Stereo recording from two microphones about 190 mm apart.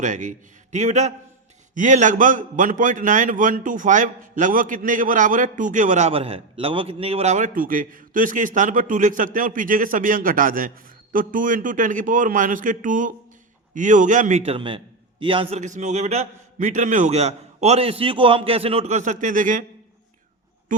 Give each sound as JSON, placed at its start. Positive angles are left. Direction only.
{"t": 0.0, "sound": "a man's voice", "side_deg": -40}